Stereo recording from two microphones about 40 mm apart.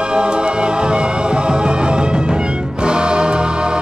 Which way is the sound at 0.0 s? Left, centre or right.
Right.